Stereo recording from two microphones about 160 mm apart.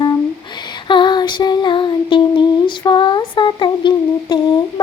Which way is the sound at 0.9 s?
30° left (ahead or behind).